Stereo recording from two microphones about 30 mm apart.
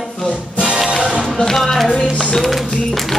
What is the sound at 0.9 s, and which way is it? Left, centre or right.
Music, right.